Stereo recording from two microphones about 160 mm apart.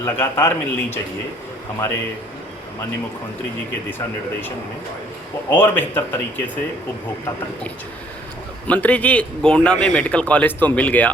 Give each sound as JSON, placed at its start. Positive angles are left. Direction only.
{"t": 0.0, "sound": "a man's voice", "side_deg": 15}
{"t": 3.8, "sound": "a man's voice", "side_deg": 15}
{"t": 8.6, "sound": "a man's voice", "side_deg": 10}